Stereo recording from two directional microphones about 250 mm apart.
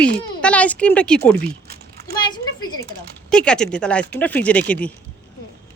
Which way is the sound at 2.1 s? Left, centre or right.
Centre.